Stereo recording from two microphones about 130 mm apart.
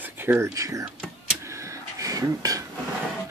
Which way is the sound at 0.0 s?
15° right (ahead or behind).